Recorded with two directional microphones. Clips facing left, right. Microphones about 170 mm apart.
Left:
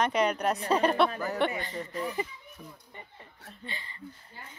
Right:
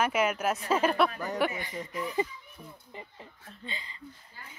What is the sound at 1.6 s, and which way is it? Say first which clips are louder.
Speech: left 1 dB; 15° right (ahead or behind).